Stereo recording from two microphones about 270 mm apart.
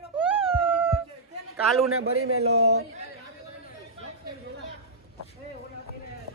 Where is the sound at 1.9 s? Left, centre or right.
Right.